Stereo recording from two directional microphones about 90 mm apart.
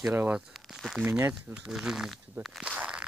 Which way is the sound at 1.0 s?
25° right (ahead or behind).